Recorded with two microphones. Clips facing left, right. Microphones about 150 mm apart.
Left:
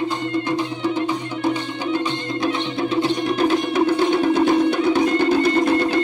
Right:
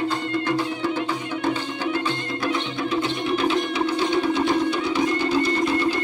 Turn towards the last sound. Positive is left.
turn(degrees=60)  # may be behind; listen again after turning